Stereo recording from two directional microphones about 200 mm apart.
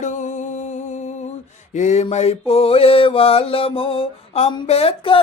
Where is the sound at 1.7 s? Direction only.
35° left (ahead or behind).